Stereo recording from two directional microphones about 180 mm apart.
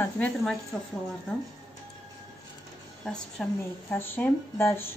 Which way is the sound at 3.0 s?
5° left (ahead or behind).